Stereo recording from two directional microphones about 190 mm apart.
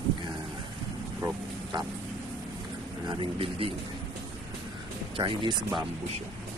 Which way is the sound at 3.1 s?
25° right (ahead or behind).